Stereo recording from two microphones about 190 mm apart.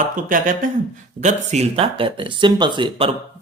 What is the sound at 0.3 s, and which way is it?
Speech, 45° right (ahead or behind).